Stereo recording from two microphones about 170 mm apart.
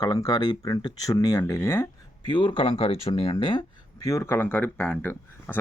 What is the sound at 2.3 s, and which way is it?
Speech, 30° left (ahead or behind).